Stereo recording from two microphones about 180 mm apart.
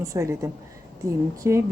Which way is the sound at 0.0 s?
15° right (ahead or behind).